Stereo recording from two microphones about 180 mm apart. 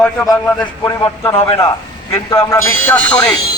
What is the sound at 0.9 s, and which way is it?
A man's voice, 20° left (ahead or behind).